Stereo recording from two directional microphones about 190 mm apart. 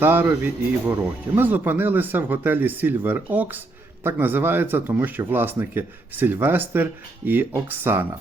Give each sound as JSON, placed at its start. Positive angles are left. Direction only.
{"t": 0.0, "sound": "speech", "side_deg": -10}